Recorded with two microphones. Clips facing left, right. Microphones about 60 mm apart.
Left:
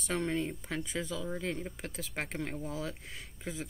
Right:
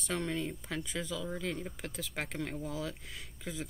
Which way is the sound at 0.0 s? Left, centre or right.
Centre.